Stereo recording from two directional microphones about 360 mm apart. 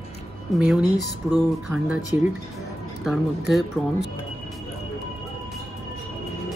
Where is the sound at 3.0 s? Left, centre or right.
Centre.